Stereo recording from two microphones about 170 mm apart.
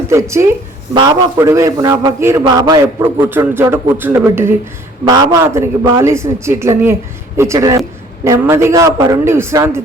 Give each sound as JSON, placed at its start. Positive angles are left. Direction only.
{"t": 0.1, "sound": "a man's voice", "side_deg": -15}